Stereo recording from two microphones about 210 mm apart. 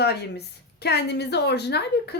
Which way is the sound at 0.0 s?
50° left (ahead or behind).